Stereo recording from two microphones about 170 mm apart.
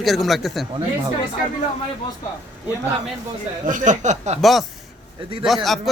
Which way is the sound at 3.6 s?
50° right (ahead or behind).